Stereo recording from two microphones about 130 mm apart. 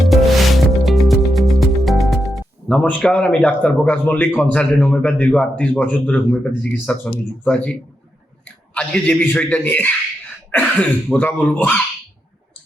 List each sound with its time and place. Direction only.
0.0 s music: centre (ahead or behind)
4.5 s a man's voice: 10° left (ahead or behind)